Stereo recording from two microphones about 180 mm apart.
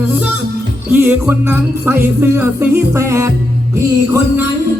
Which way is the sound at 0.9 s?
10° right (ahead or behind).